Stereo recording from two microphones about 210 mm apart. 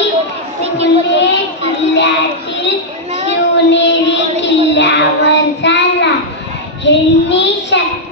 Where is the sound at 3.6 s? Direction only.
60° left (ahead or behind).